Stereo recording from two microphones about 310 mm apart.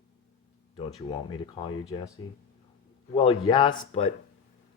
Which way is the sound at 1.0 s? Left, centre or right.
Centre.